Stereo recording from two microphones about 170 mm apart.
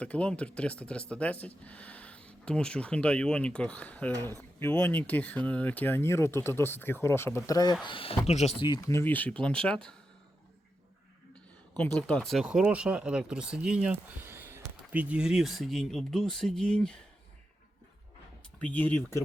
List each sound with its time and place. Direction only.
0.0 s speech: 5° left (ahead or behind)
7.9 s speech: 30° left (ahead or behind)
8.6 s speech: 25° left (ahead or behind)
9.0 s speech: 10° left (ahead or behind)
11.8 s speech: 5° left (ahead or behind)
18.6 s speech: 10° left (ahead or behind)